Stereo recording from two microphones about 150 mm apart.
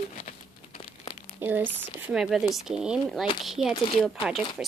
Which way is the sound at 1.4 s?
15° right (ahead or behind).